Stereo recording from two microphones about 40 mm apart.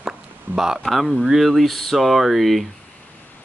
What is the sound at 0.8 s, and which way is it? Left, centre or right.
Speech, centre.